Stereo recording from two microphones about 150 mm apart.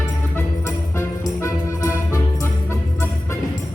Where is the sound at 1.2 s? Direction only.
20° left (ahead or behind).